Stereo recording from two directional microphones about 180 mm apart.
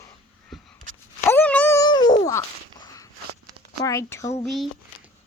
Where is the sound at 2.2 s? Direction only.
20° left (ahead or behind).